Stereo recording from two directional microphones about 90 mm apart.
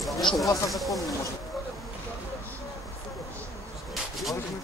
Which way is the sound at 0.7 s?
Centre (ahead or behind).